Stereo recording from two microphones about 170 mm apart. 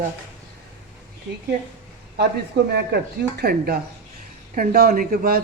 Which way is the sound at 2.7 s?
70° right (ahead or behind).